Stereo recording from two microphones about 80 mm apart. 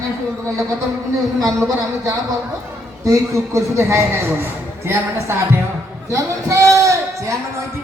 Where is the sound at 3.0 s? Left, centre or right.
Right.